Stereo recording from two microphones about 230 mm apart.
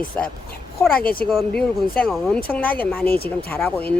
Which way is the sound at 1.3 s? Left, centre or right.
Centre.